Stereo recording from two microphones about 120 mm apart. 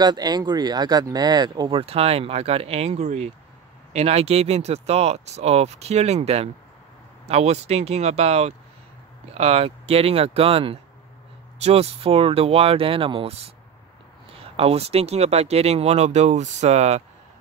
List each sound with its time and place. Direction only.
0.0 s speech: 35° right (ahead or behind)
1.7 s speech: 55° right (ahead or behind)